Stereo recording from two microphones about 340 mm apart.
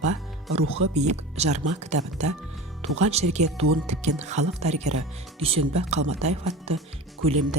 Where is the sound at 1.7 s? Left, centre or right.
Right.